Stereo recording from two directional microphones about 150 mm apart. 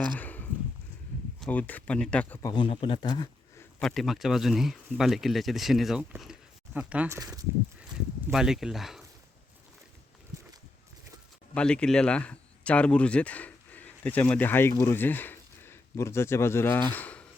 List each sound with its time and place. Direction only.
0.2 s a sound: 10° left (ahead or behind)
1.4 s speech: 10° left (ahead or behind)
2.4 s a man's voice: 30° left (ahead or behind)
3.8 s speech: centre (ahead or behind)
7.2 s speech: 25° right (ahead or behind)
8.3 s speech: 5° right (ahead or behind)
11.5 s speech: 5° left (ahead or behind)